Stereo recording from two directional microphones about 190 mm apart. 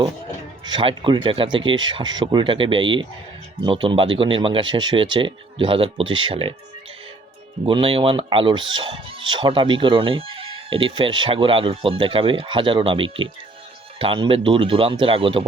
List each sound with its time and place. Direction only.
0.6 s speech: 25° right (ahead or behind)
7.6 s speech: 30° right (ahead or behind)